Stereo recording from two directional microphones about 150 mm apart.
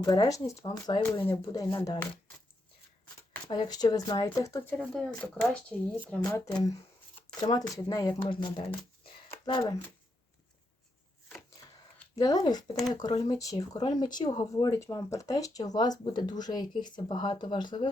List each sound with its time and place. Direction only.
0.0 s speech: 25° left (ahead or behind)
3.5 s speech: 30° left (ahead or behind)
4.7 s speech: 5° left (ahead or behind)
6.2 s speech: 20° left (ahead or behind)
12.1 s speech: 25° left (ahead or behind)